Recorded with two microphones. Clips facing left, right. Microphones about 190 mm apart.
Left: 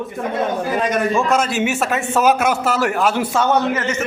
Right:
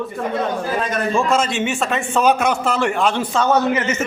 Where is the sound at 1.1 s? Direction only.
Centre (ahead or behind).